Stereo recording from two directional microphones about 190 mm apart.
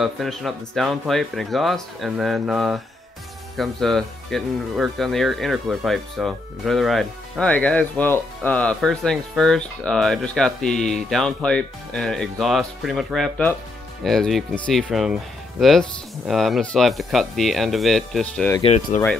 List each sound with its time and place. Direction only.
0.0 s speech: centre (ahead or behind)
18.9 s speech: 40° left (ahead or behind)